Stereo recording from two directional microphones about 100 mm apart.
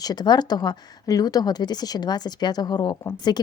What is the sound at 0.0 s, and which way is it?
A woman's voice, 45° left (ahead or behind).